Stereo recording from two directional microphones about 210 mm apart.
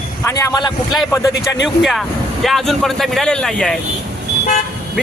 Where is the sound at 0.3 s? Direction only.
15° left (ahead or behind).